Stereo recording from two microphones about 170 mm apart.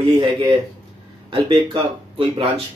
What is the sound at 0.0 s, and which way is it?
Speech, 30° right (ahead or behind).